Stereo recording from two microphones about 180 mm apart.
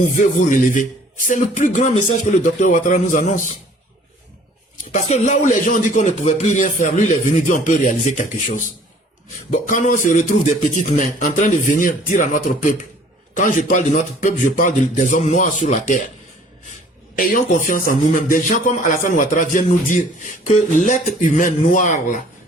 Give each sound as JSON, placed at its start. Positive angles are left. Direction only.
{"t": 0.3, "sound": "a man's voice", "side_deg": 45}
{"t": 4.9, "sound": "a man's voice", "side_deg": 40}
{"t": 17.2, "sound": "a man's voice", "side_deg": 50}